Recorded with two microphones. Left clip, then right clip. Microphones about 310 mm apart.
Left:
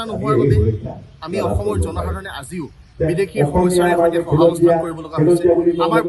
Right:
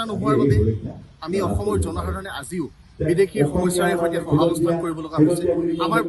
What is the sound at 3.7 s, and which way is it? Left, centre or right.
Speech, left.